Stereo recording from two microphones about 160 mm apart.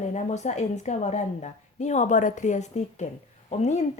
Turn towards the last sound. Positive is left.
turn(degrees=45)  # may be behind; listen again after turning